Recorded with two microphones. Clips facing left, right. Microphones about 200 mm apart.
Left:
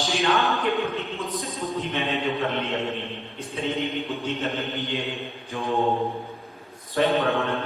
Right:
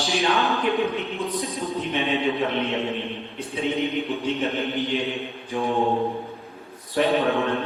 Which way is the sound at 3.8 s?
15° right (ahead or behind).